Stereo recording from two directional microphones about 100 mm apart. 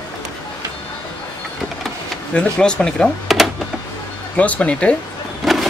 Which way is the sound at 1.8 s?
10° left (ahead or behind).